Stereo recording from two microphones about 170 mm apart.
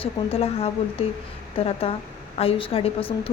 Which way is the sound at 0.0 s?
35° left (ahead or behind).